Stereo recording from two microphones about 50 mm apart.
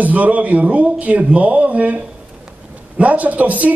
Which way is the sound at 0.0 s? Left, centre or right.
Right.